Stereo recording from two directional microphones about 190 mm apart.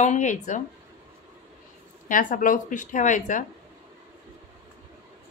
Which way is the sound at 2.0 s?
45° left (ahead or behind).